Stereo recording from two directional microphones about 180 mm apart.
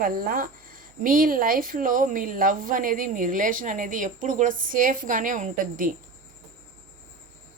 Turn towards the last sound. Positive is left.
turn(degrees=-50)  # may be behind; listen again after turning